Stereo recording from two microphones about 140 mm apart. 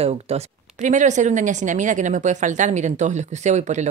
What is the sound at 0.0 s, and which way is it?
Speech, 50° right (ahead or behind).